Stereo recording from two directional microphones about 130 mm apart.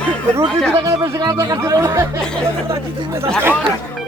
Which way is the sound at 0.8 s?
30° right (ahead or behind).